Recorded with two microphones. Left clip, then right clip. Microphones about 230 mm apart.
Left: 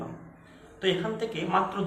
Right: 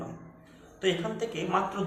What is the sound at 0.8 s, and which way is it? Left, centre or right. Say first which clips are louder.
A man's voice: left 1 dB; centre.